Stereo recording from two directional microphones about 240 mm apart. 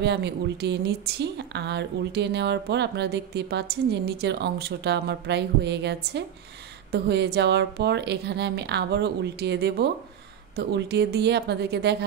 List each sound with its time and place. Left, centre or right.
0.0 s a woman's voice: right